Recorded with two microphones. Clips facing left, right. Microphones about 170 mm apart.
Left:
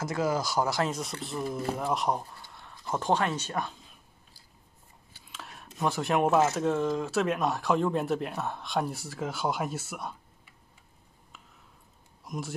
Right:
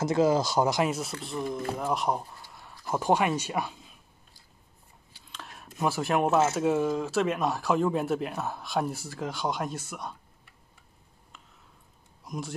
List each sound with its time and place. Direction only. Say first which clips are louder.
0.0 s speech: right 5 dB; 25° right (ahead or behind); by 4.0 s 5° right (ahead or behind)
5.3 s speech: right 1 dB; centre (ahead or behind)
12.3 s speech: even; centre (ahead or behind)